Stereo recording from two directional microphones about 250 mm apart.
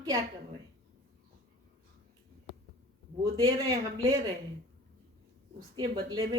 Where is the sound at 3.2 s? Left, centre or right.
Centre.